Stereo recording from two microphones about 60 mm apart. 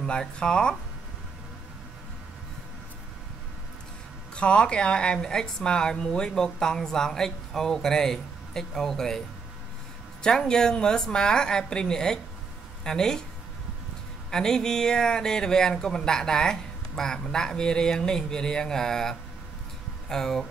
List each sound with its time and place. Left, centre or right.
0.0 s speech: centre
4.4 s speech: centre
10.2 s speech: centre
14.3 s speech: centre